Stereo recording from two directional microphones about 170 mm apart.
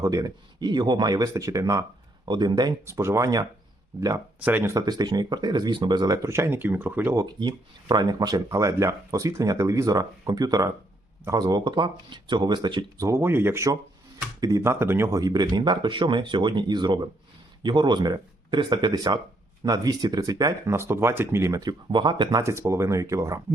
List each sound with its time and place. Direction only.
0.0 s speech: 20° right (ahead or behind)
7.3 s speech: 25° right (ahead or behind)